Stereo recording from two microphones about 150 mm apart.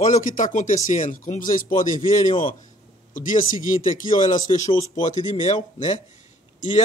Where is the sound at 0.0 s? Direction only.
60° left (ahead or behind).